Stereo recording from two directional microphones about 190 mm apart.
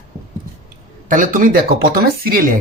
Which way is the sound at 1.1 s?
45° right (ahead or behind).